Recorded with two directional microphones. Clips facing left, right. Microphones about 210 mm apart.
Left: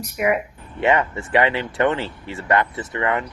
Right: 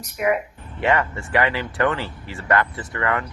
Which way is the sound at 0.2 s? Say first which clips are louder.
Left 1 dB; 15° left (ahead or behind).